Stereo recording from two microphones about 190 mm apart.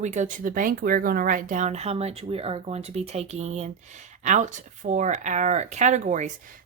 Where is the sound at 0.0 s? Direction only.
40° right (ahead or behind).